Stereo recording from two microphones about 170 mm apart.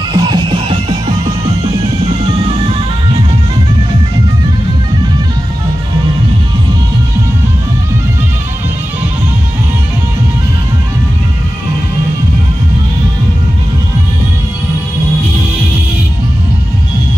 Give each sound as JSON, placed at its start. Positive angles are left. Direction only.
{"t": 0.1, "sound": "music", "side_deg": -30}